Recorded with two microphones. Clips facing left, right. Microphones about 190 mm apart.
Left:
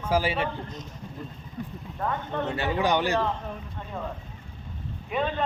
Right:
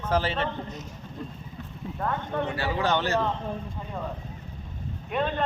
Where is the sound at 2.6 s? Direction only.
20° left (ahead or behind).